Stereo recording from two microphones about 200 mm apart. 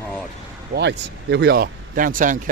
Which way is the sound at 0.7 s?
55° right (ahead or behind).